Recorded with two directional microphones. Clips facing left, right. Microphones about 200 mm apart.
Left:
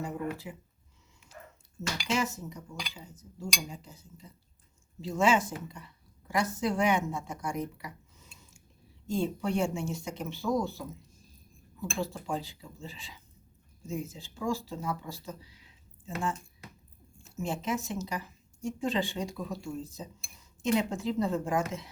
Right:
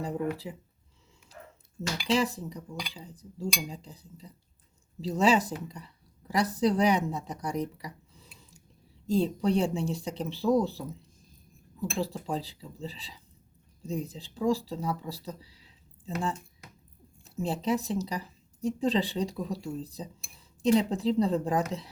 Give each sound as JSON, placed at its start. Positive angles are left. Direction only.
{"t": 0.0, "sound": "a sound", "side_deg": -35}
{"t": 2.0, "sound": "a woman's voice", "side_deg": -35}
{"t": 12.3, "sound": "speech", "side_deg": -35}